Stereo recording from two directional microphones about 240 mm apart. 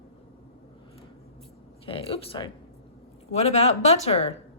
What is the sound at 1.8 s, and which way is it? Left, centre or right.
Speech, left.